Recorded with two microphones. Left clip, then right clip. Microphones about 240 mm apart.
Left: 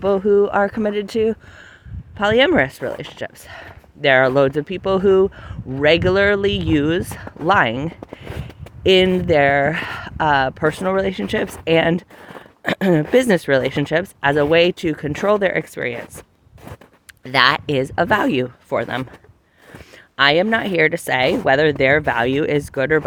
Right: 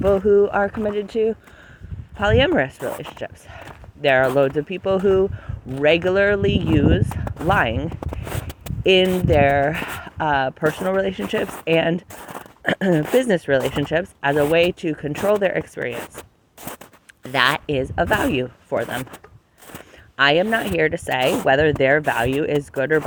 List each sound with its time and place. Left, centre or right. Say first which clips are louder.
0.0 s speech: even; left
8.0 s a sound: right 3 dB; right
8.8 s speech: left 2 dB; left
12.1 s zipper: right 3 dB; right
12.6 s speech: left 2 dB; left
17.3 s speech: left 3 dB; left
20.1 s speech: left 2 dB; left